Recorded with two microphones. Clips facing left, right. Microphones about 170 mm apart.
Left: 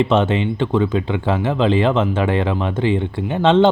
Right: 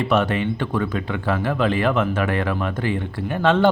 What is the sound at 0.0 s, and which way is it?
Speech, 25° left (ahead or behind).